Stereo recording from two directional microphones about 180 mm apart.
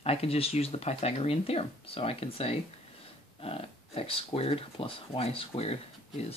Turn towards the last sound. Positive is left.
turn(degrees=35)  # may be behind; listen again after turning